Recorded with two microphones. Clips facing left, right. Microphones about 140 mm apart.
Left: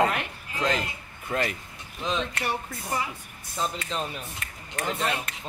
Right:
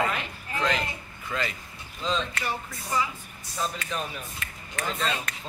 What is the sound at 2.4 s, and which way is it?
Music, 60° left (ahead or behind).